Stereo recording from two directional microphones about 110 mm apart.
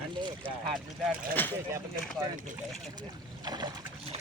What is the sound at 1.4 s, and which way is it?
Speech, 15° left (ahead or behind).